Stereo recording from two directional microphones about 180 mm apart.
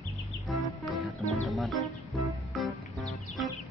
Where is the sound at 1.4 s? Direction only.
Centre (ahead or behind).